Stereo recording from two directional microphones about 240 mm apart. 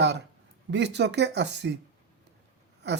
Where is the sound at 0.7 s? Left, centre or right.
Right.